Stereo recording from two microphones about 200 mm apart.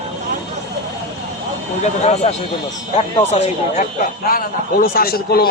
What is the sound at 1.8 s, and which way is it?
A man's voice, 35° left (ahead or behind).